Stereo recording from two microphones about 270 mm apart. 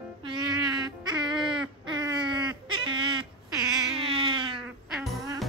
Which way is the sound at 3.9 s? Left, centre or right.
Centre.